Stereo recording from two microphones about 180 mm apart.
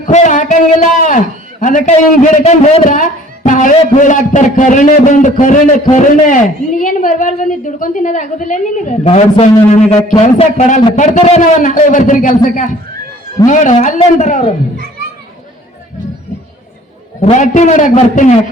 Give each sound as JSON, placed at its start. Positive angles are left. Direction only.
{"t": 0.0, "sound": "a man's voice", "side_deg": 40}
{"t": 17.2, "sound": "a man's voice", "side_deg": 40}